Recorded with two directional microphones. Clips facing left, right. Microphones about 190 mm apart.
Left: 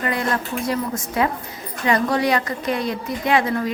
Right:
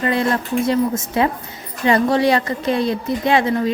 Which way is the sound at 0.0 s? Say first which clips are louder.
Right 4 dB; 25° right (ahead or behind).